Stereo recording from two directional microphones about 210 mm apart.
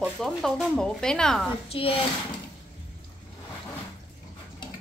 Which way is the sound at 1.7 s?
25° left (ahead or behind).